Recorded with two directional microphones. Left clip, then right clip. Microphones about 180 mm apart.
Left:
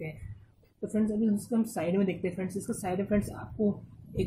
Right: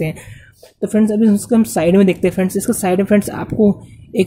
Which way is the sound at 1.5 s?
55° right (ahead or behind).